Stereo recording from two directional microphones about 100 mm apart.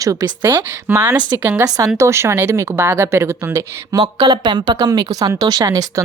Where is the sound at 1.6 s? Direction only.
40° right (ahead or behind).